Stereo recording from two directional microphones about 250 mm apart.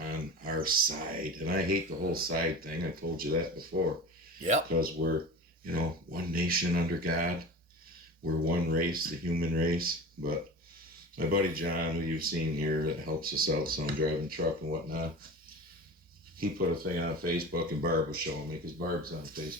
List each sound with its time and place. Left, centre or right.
0.0 s speech: right
8.4 s speech: right
16.4 s speech: right